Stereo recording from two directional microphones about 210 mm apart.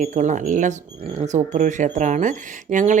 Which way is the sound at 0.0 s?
35° right (ahead or behind).